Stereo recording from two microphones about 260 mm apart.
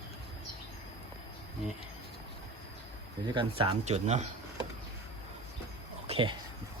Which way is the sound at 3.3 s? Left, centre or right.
Centre.